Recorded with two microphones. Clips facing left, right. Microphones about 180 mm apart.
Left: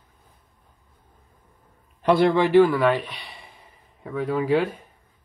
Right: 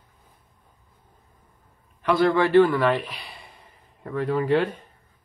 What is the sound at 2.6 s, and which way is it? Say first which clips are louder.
Speech: left 1 dB; centre (ahead or behind).